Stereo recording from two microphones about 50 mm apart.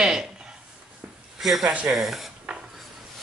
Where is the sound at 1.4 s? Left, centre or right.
Centre.